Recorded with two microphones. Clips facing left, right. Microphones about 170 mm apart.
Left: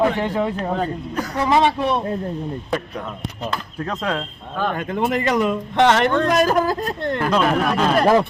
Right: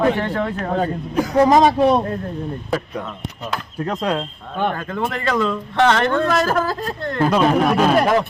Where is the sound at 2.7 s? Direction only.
5° right (ahead or behind).